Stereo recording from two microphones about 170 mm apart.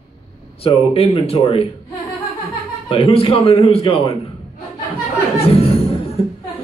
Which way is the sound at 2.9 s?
35° left (ahead or behind).